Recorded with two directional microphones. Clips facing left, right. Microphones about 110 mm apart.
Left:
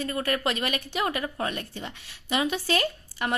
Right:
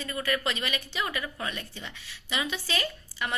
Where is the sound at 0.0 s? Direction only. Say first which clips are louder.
Left 3 dB; 50° left (ahead or behind).